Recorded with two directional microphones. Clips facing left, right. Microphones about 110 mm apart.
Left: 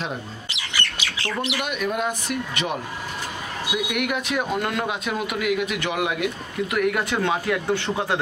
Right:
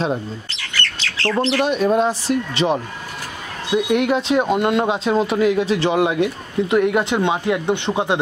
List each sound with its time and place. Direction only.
0.5 s bird: 15° left (ahead or behind)
1.6 s speech: 30° right (ahead or behind)